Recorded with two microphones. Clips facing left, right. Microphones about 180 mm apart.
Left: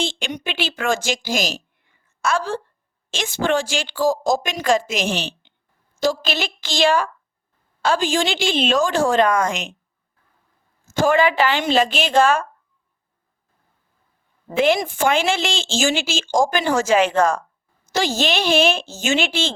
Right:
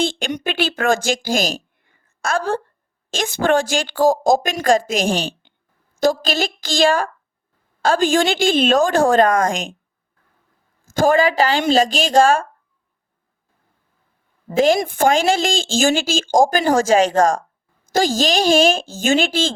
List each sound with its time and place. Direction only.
0.0 s speech: 50° right (ahead or behind)
1.9 s a sound: 50° right (ahead or behind)
3.1 s speech: 50° right (ahead or behind)
10.9 s a woman's voice: 45° right (ahead or behind)
14.5 s speech: 40° right (ahead or behind)
14.8 s speech: 55° right (ahead or behind)